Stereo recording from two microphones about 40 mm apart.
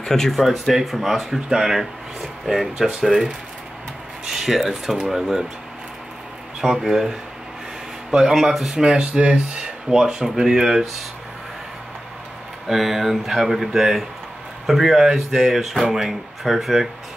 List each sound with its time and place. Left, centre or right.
0.0 s speech: centre
0.4 s speech: centre
4.3 s speech: centre
6.6 s speech: centre
8.7 s speech: centre
12.6 s speech: centre